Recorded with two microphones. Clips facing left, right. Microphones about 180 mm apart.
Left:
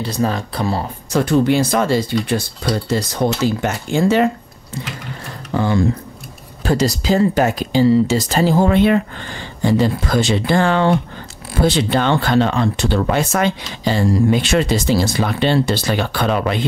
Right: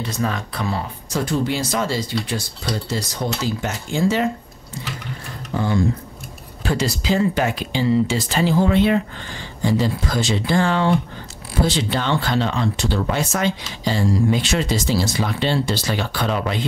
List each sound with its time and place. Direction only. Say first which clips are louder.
0.0 s speech: left 4 dB; 35° left (ahead or behind)
1.1 s speech: left 7 dB; 60° left (ahead or behind)
5.5 s music: left 4 dB; 80° left
6.6 s speech: left 5 dB; 40° left (ahead or behind); by 16.6 s 65° left (ahead or behind)